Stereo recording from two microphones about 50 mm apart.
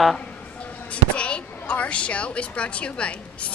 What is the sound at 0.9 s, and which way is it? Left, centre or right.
A woman's voice, left.